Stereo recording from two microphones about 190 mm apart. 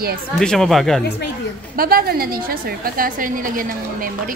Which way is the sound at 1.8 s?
50° right (ahead or behind).